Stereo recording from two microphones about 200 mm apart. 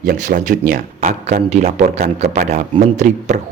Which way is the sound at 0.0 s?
45° right (ahead or behind).